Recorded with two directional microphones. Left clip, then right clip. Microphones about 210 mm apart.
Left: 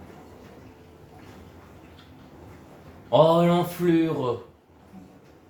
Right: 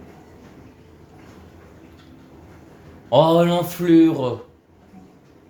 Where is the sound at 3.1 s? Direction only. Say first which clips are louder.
Right 3 dB; 55° right (ahead or behind).